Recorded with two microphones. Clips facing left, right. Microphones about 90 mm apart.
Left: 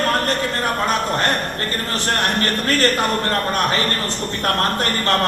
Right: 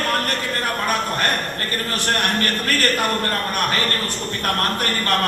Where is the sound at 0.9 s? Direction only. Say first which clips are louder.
Left 2 dB; 25° left (ahead or behind).